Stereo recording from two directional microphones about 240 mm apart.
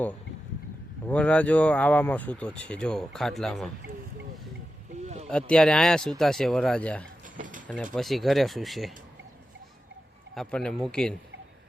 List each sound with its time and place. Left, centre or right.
1.0 s speech: centre
5.0 s boat: right
5.3 s speech: centre
7.3 s a sound: right
7.9 s speech: centre
10.3 s speech: centre